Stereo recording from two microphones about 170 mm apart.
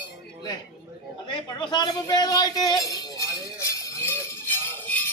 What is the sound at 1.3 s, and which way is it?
A man's voice, 30° left (ahead or behind).